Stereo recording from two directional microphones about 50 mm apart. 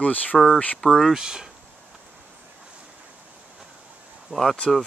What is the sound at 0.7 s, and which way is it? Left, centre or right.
Speech, centre.